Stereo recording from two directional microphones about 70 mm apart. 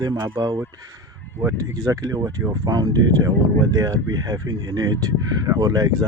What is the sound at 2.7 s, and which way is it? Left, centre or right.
Speech, right.